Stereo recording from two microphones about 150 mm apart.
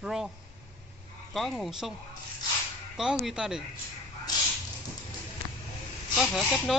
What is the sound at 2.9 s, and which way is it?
Speech, centre (ahead or behind).